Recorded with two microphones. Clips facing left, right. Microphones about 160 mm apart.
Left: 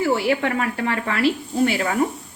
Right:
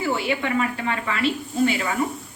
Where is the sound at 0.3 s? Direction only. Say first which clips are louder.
Left 2 dB; 60° left (ahead or behind).